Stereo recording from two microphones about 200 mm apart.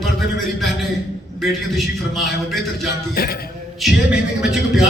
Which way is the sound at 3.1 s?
50° left (ahead or behind).